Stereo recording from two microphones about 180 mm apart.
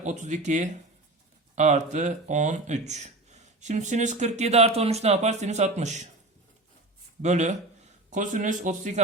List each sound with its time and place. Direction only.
0.0 s speech: 40° right (ahead or behind)
7.2 s speech: 40° right (ahead or behind)